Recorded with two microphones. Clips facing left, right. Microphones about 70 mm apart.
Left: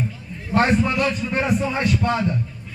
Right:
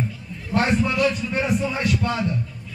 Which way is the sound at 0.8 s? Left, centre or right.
Left.